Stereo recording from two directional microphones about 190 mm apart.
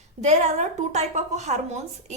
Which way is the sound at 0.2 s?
35° right (ahead or behind).